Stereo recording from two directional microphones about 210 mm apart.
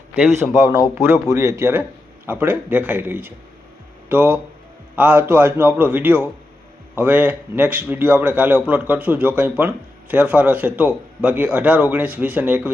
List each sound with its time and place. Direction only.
0.1 s a man's voice: 15° right (ahead or behind)